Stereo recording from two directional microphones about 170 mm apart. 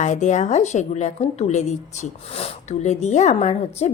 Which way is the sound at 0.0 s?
45° left (ahead or behind).